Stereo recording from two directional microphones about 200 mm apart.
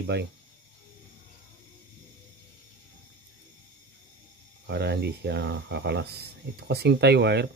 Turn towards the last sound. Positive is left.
turn(degrees=-55)  # may be behind; listen again after turning